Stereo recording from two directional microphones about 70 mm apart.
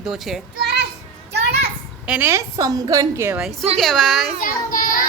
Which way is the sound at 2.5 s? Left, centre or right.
Right.